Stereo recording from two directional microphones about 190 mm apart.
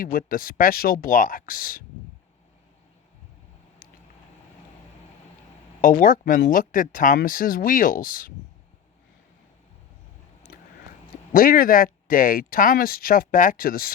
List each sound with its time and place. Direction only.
0.0 s speech: 50° left (ahead or behind)
5.8 s speech: 45° left (ahead or behind)
10.5 s a sound: 50° left (ahead or behind)
11.3 s speech: 50° left (ahead or behind)